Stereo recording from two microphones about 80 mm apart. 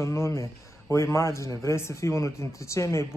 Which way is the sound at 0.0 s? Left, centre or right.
Left.